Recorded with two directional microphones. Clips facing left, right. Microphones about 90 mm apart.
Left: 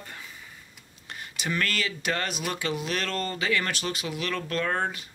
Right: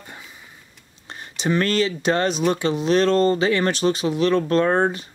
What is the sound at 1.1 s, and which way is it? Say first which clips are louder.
Speech: right 9 dB; 30° right (ahead or behind).